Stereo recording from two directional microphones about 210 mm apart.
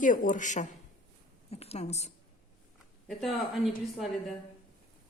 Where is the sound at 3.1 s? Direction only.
Centre (ahead or behind).